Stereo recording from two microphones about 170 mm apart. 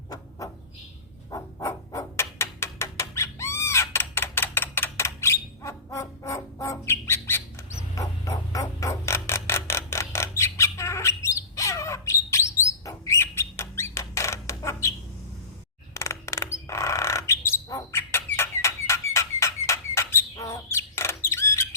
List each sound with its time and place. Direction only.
0.1 s bird: 20° left (ahead or behind)
1.3 s a sound: 20° left (ahead or behind)
7.1 s music: 15° left (ahead or behind)
12.8 s rodents: 20° left (ahead or behind)
16.0 s bird: 15° left (ahead or behind)
18.3 s a sound: 15° left (ahead or behind)